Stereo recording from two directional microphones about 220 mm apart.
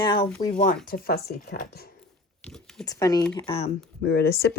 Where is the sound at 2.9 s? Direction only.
15° left (ahead or behind).